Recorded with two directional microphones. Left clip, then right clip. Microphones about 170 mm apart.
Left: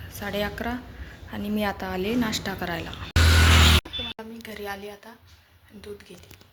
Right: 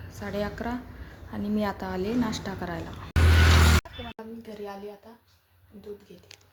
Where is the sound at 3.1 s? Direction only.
60° left (ahead or behind).